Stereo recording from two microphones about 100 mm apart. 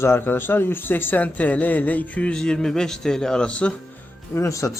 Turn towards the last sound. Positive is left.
turn(degrees=35)  # may be behind; listen again after turning